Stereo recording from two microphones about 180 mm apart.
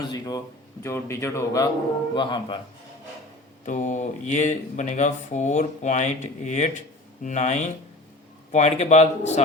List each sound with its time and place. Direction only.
0.1 s a man's voice: 20° left (ahead or behind)
3.7 s speech: 45° left (ahead or behind)